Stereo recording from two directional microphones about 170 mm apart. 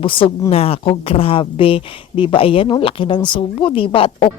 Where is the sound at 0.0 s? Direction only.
30° left (ahead or behind).